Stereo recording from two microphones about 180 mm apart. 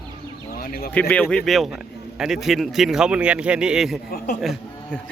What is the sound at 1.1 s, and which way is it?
A man's voice, 5° left (ahead or behind).